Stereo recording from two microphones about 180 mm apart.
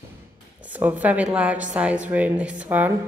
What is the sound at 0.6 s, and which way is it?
A woman's voice, 10° right (ahead or behind).